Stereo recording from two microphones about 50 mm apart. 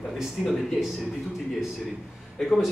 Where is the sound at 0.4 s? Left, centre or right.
Centre.